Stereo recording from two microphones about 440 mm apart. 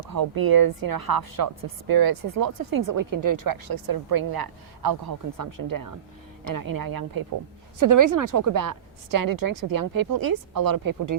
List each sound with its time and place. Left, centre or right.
0.1 s speech: right